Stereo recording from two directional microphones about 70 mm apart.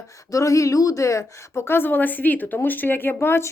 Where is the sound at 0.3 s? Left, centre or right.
Left.